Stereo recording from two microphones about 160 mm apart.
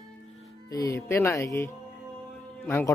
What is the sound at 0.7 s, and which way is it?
Speech, 20° left (ahead or behind).